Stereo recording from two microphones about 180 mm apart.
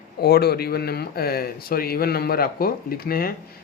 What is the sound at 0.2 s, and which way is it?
Speech, 60° left (ahead or behind).